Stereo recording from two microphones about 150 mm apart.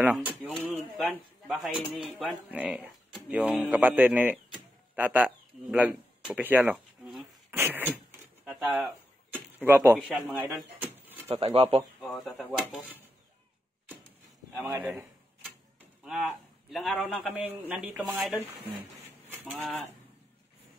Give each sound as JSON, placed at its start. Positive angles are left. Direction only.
{"t": 0.0, "sound": "speech", "side_deg": -10}
{"t": 6.7, "sound": "a sound", "side_deg": 0}
{"t": 7.5, "sound": "speech", "side_deg": -15}
{"t": 8.5, "sound": "a sound", "side_deg": -10}
{"t": 9.9, "sound": "speech", "side_deg": 0}
{"t": 10.5, "sound": "a sound", "side_deg": -10}
{"t": 11.2, "sound": "speech", "side_deg": -40}
{"t": 12.0, "sound": "speech", "side_deg": 0}
{"t": 14.6, "sound": "speech", "side_deg": -15}
{"t": 16.0, "sound": "a man's voice", "side_deg": -5}
{"t": 17.3, "sound": "speech", "side_deg": -10}
{"t": 18.0, "sound": "speech", "side_deg": 0}
{"t": 19.5, "sound": "speech", "side_deg": 0}